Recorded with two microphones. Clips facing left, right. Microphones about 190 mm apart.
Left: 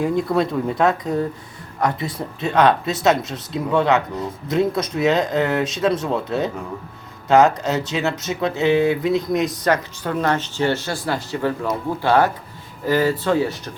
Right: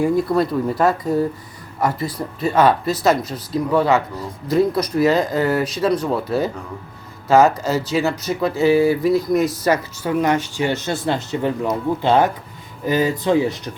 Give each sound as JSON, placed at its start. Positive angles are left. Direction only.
{"t": 0.0, "sound": "speech", "side_deg": -5}